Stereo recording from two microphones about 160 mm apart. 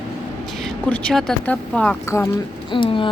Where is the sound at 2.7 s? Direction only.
30° left (ahead or behind).